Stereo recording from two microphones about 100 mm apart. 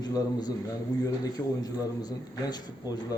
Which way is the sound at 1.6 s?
40° left (ahead or behind).